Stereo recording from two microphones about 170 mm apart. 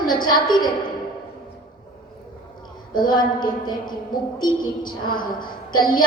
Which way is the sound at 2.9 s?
25° left (ahead or behind).